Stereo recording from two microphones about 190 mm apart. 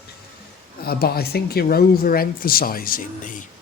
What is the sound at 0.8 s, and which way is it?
Speech, 55° left (ahead or behind).